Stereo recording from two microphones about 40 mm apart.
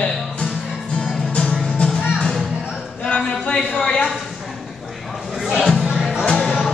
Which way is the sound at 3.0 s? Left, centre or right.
Left.